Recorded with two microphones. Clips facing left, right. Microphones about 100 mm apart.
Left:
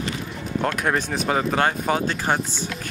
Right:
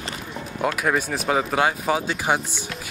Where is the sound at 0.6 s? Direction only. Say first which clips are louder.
Even; 5° right (ahead or behind).